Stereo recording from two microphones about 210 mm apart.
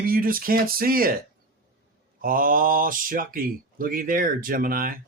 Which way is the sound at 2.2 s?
40° right (ahead or behind).